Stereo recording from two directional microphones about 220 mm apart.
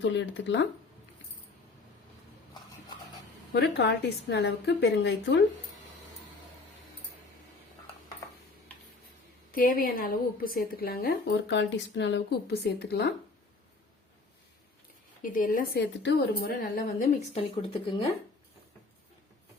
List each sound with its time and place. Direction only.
0.0 s speech: 55° left (ahead or behind)
3.5 s a woman's voice: 50° left (ahead or behind)
9.5 s a woman's voice: 40° left (ahead or behind)
15.2 s speech: 40° left (ahead or behind)
17.0 s speech: 30° left (ahead or behind)